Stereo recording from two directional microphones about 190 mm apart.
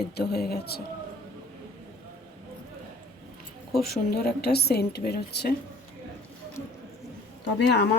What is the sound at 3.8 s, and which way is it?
A woman's voice, 55° left (ahead or behind).